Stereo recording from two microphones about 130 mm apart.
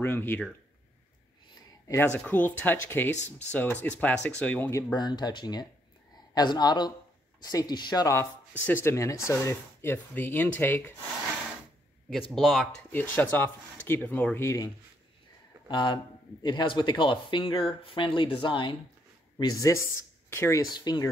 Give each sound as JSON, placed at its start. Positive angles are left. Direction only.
{"t": 0.0, "sound": "speech", "side_deg": 15}
{"t": 1.9, "sound": "speech", "side_deg": 15}
{"t": 3.2, "sound": "speech", "side_deg": 60}
{"t": 3.5, "sound": "speech", "side_deg": 10}
{"t": 4.9, "sound": "speech", "side_deg": 35}
{"t": 8.2, "sound": "speech", "side_deg": 15}
{"t": 12.1, "sound": "speech", "side_deg": 0}
{"t": 12.9, "sound": "speech", "side_deg": 15}
{"t": 15.7, "sound": "speech", "side_deg": 35}
{"t": 19.3, "sound": "speech", "side_deg": 25}
{"t": 20.7, "sound": "speech", "side_deg": 35}